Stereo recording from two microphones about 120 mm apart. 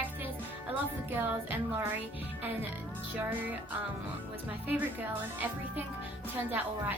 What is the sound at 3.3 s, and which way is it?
Speech, 15° right (ahead or behind).